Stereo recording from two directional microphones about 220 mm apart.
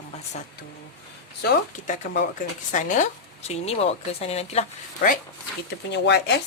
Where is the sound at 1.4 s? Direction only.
45° left (ahead or behind).